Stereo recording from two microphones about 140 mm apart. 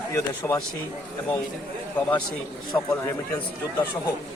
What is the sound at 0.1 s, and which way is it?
Speech, 20° left (ahead or behind).